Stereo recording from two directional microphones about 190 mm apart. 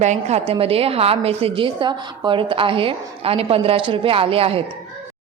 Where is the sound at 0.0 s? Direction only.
35° right (ahead or behind).